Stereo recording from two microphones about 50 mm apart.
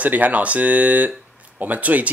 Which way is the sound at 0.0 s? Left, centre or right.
Right.